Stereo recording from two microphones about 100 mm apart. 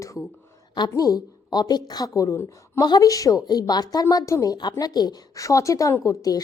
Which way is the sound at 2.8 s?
40° left (ahead or behind).